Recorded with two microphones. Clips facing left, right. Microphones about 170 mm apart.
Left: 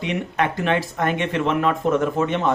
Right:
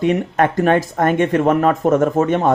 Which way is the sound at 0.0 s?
45° right (ahead or behind).